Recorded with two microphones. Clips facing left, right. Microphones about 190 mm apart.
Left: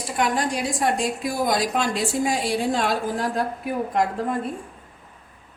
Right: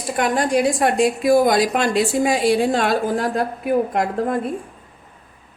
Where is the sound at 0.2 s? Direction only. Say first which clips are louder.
Right 5 dB; 55° right (ahead or behind).